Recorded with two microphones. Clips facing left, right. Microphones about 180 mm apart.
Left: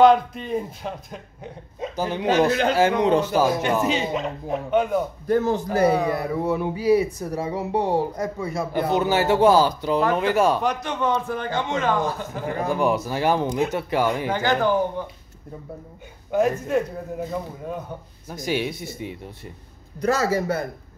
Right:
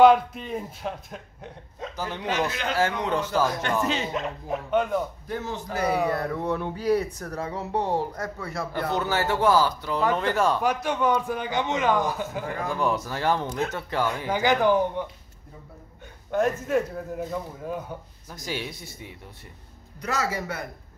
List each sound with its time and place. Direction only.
0.0 s speech: 5° right (ahead or behind)
1.8 s a man's voice: 20° left (ahead or behind)
2.2 s a man's voice: 35° left (ahead or behind)
3.3 s speech: 10° left (ahead or behind)
5.3 s a man's voice: 45° left (ahead or behind)
6.0 s speech: 10° left (ahead or behind)
10.6 s a man's voice: 5° right (ahead or behind)
12.5 s speech: 20° left (ahead or behind)
14.3 s a man's voice: 15° right (ahead or behind)
16.3 s speech: centre (ahead or behind)
18.4 s speech: 20° left (ahead or behind)
20.1 s a man's voice: 30° left (ahead or behind)